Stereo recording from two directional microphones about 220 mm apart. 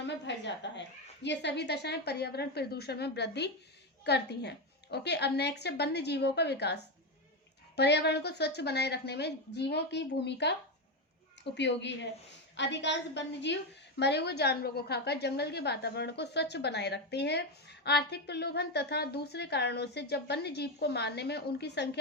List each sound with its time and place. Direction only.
0.0 s a woman's voice: 55° left (ahead or behind)
7.8 s a woman's voice: 50° left (ahead or behind)
11.5 s a woman's voice: 50° left (ahead or behind)